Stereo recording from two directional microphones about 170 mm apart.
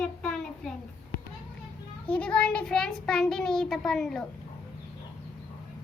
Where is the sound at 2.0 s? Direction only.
5° left (ahead or behind).